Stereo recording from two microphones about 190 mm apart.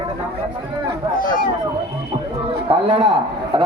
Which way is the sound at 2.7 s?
30° right (ahead or behind).